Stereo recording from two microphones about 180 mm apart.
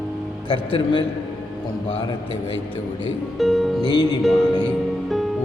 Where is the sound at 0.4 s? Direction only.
30° left (ahead or behind).